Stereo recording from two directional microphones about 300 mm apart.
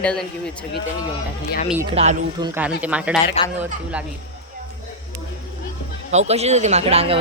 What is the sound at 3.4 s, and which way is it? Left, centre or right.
Speech, left.